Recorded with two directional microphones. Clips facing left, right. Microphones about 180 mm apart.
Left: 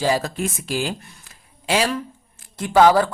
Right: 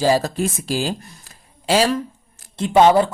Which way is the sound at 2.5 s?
25° right (ahead or behind).